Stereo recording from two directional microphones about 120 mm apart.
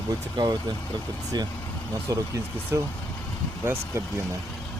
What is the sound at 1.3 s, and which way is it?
Speech, 35° right (ahead or behind).